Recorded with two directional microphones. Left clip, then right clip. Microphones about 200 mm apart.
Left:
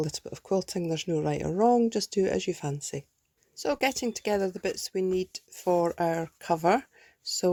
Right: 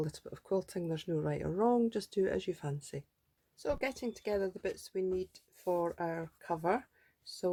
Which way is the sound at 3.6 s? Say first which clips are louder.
Left 8 dB; 40° left (ahead or behind).